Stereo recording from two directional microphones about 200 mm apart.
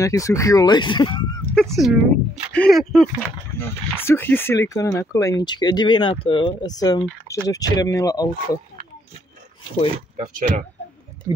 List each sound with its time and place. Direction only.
0.0 s speech: 15° left (ahead or behind)
1.4 s speech: 5° left (ahead or behind)
3.5 s speech: 10° left (ahead or behind)
10.2 s speech: 40° right (ahead or behind)